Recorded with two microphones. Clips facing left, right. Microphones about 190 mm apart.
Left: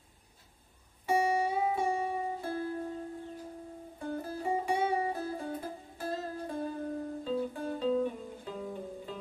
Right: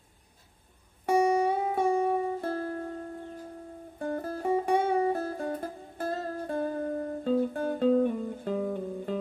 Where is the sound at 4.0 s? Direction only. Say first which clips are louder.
Right 5 dB; 60° right (ahead or behind).